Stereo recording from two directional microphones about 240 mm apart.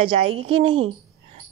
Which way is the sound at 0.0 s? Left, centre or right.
Right.